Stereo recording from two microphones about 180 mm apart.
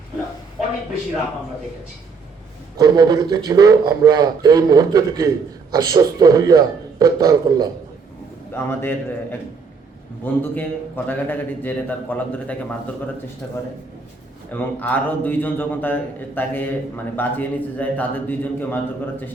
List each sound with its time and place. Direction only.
2.7 s a man's voice: 20° right (ahead or behind)
8.5 s a man's voice: 10° left (ahead or behind)
10.2 s a man's voice: 10° left (ahead or behind)